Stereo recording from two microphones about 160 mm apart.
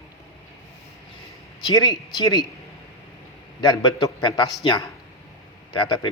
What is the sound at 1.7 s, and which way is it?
Speech, 25° left (ahead or behind).